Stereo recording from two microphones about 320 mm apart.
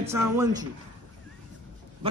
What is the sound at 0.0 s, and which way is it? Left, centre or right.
Speech, centre.